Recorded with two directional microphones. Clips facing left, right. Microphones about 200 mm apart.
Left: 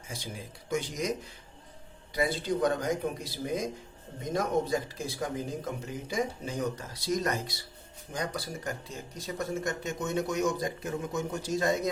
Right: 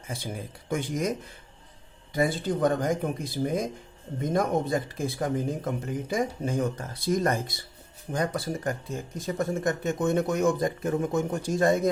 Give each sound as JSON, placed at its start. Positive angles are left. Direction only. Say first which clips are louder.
{"t": 0.1, "sound": "speech", "louder": "right 5 dB", "side_deg": -55}
{"t": 2.1, "sound": "speech", "louder": "right 3 dB", "side_deg": -50}